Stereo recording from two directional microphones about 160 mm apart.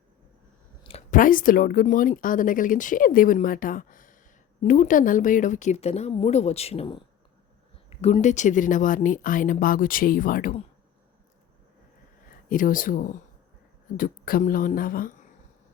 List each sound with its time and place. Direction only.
1.1 s speech: 60° left (ahead or behind)
12.5 s speech: 60° left (ahead or behind)